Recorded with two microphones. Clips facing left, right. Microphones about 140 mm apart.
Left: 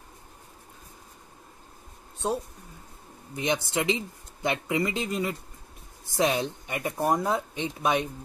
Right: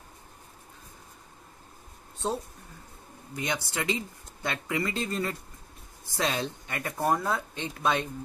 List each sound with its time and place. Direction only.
3.3 s speech: 20° left (ahead or behind)